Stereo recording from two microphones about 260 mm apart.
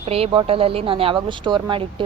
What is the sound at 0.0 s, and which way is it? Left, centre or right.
Speech, right.